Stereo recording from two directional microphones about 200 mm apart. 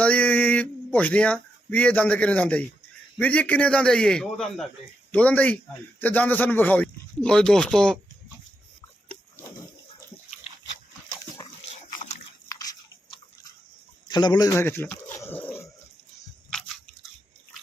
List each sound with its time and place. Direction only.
0.0 s male singing: 5° left (ahead or behind)
0.9 s a man's voice: 5° left (ahead or behind)
11.3 s a sound: 30° left (ahead or behind)
12.5 s biting: 20° left (ahead or behind)
14.1 s dog: 20° left (ahead or behind)
16.5 s biting: centre (ahead or behind)